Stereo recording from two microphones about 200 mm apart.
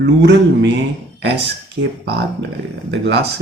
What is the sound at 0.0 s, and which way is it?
Speech, 65° right (ahead or behind).